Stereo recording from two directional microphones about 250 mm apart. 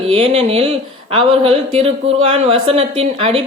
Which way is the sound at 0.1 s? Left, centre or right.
Right.